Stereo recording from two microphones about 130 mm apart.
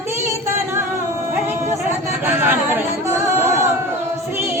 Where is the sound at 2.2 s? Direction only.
15° right (ahead or behind).